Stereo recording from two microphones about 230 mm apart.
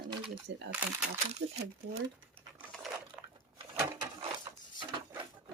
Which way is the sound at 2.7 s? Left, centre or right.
Centre.